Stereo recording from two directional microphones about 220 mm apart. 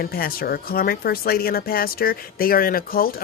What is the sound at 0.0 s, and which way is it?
Speech, 45° left (ahead or behind).